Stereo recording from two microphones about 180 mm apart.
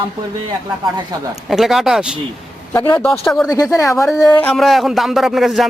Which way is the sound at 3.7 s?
15° left (ahead or behind).